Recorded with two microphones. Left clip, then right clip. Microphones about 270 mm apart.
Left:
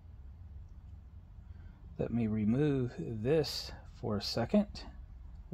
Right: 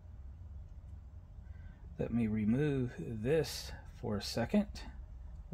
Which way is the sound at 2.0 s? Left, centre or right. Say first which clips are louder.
Left 1 dB; left.